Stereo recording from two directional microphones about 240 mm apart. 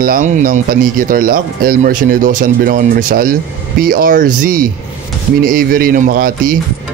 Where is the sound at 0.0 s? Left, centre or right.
Right.